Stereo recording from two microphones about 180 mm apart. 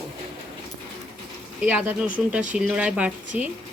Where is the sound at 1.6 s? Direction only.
5° right (ahead or behind).